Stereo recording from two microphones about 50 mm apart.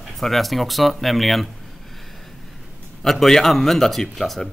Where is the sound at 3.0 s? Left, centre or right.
Centre.